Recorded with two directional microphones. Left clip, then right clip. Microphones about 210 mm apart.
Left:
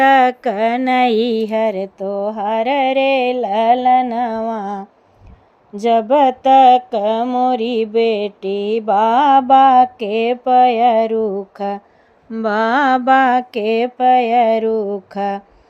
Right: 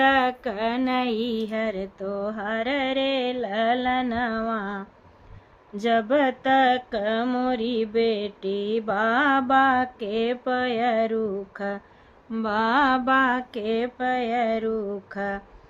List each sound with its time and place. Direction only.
0.0 s mantra: 25° left (ahead or behind)